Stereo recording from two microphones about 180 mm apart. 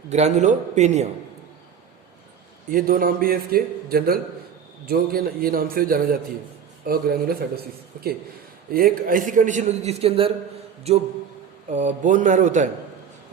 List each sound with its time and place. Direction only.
0.1 s a man's voice: 40° right (ahead or behind)
2.7 s a man's voice: 50° right (ahead or behind)
8.7 s a man's voice: 50° right (ahead or behind)